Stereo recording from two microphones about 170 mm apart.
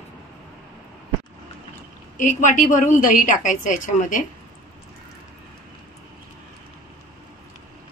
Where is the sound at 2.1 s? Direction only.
50° left (ahead or behind).